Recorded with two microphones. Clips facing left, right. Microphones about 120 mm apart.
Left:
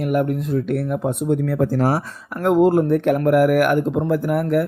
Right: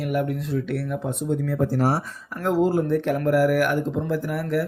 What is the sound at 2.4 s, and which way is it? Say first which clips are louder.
Speech: left 6 dB; 60° left (ahead or behind).